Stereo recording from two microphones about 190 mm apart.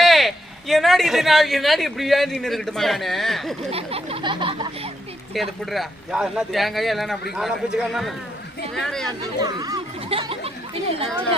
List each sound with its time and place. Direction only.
0.0 s speech: centre (ahead or behind)
3.7 s a sound: 30° right (ahead or behind)
5.3 s speech: centre (ahead or behind)
9.0 s speech: 20° right (ahead or behind)